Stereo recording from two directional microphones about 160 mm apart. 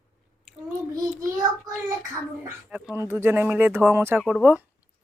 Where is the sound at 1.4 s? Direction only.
20° right (ahead or behind).